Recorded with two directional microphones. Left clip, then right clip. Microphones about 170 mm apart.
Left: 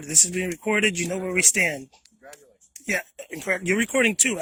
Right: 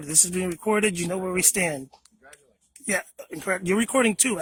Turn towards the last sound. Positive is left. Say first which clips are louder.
# left 1 dB
turn(degrees=-40)  # may be behind; listen again after turning